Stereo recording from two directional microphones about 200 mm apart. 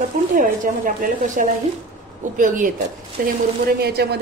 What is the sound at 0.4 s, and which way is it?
A woman's voice, 40° right (ahead or behind).